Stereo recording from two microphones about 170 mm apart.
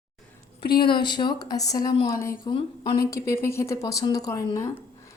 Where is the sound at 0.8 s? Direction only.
30° left (ahead or behind).